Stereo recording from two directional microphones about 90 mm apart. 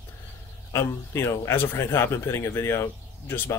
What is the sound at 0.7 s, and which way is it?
Speech, 30° left (ahead or behind).